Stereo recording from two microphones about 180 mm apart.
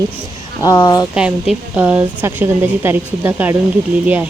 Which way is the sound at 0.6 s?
20° left (ahead or behind).